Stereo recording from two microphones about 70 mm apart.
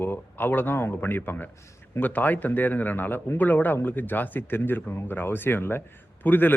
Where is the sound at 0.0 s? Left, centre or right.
Left.